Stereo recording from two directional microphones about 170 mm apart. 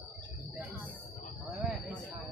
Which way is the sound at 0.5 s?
5° right (ahead or behind).